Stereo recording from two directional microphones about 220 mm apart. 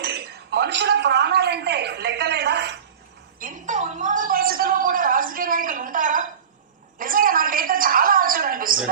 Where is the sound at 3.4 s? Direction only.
35° right (ahead or behind).